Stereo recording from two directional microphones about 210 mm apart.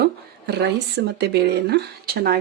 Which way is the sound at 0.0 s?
50° right (ahead or behind).